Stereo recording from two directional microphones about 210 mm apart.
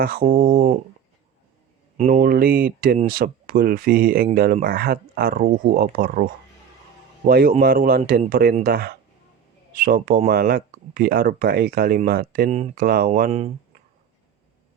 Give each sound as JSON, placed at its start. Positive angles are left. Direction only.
{"t": 0.0, "sound": "speech", "side_deg": -45}
{"t": 0.3, "sound": "speech", "side_deg": -25}
{"t": 2.0, "sound": "speech", "side_deg": -40}
{"t": 7.3, "sound": "speech", "side_deg": -45}